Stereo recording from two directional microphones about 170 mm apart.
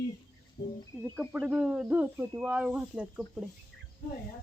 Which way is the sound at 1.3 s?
5° right (ahead or behind).